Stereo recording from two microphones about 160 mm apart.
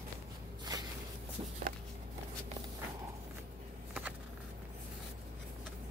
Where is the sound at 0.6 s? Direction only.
25° right (ahead or behind).